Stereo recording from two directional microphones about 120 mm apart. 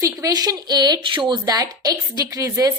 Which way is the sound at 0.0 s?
30° right (ahead or behind).